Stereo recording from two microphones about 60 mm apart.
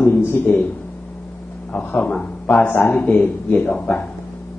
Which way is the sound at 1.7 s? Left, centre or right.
Left.